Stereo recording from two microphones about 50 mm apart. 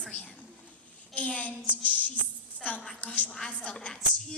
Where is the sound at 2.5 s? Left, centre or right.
Left.